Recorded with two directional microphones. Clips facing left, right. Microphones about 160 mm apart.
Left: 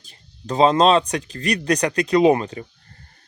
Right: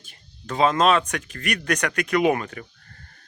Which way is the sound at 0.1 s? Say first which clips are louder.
Left 5 dB; 35° left (ahead or behind).